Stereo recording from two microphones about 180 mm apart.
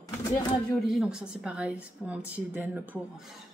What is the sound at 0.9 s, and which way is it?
A woman's voice, 5° right (ahead or behind).